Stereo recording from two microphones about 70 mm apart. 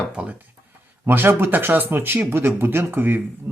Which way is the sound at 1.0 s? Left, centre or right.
Right.